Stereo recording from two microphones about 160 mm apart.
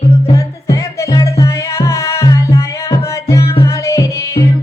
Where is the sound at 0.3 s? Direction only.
20° left (ahead or behind).